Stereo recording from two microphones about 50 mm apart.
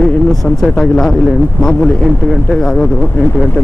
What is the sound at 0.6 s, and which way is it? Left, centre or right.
Speech, centre.